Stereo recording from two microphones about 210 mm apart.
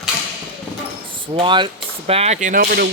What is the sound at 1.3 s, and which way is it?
Speech, 25° right (ahead or behind).